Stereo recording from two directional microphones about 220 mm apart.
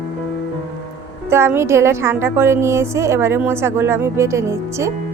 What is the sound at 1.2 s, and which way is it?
A woman's voice, 10° right (ahead or behind).